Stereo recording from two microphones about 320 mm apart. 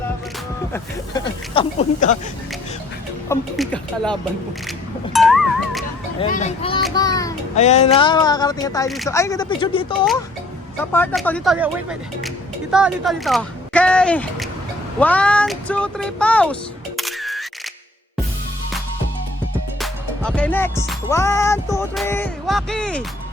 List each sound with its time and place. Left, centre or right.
0.7 s speech: centre
3.2 s speech: centre
5.1 s cat: centre
6.1 s speech: left
7.5 s speech: left
10.9 s speech: centre
17.0 s music: centre
19.8 s music: centre